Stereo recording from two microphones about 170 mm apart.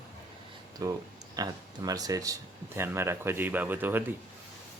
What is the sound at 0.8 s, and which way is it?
A man's voice, 20° right (ahead or behind).